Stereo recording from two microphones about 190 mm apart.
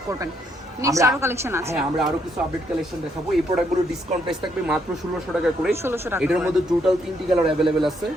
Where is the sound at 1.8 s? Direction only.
Centre (ahead or behind).